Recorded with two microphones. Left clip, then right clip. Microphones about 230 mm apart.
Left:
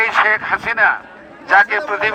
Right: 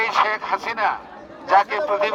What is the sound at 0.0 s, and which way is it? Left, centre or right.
A man's voice, left.